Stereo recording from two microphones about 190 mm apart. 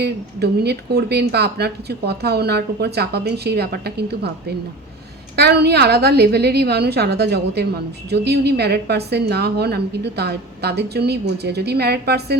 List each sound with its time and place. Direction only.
0.0 s speech: 60° right (ahead or behind)